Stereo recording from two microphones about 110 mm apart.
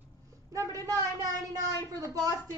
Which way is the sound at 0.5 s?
30° right (ahead or behind).